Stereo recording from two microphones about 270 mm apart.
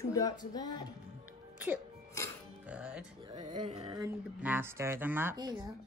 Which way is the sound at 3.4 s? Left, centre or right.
Right.